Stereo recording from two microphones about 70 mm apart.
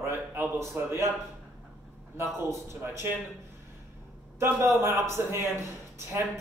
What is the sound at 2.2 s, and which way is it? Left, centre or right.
Speech, right.